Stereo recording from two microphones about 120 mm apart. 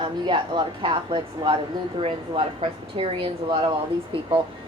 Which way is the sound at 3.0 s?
55° right (ahead or behind).